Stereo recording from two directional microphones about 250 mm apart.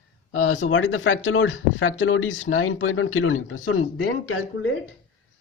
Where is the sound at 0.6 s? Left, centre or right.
Left.